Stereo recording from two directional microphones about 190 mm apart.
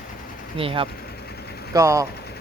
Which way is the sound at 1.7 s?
15° right (ahead or behind).